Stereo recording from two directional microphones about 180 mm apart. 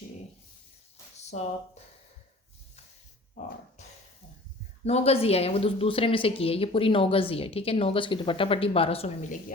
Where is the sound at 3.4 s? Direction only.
40° left (ahead or behind).